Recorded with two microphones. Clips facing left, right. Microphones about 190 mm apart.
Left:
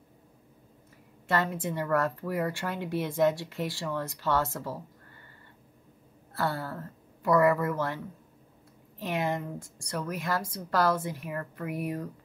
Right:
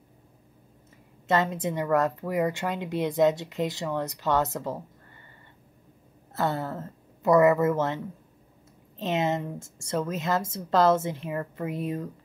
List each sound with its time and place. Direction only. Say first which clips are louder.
1.2 s a woman's voice: right 4 dB; 20° right (ahead or behind)
6.3 s a woman's voice: right 3 dB; 20° right (ahead or behind)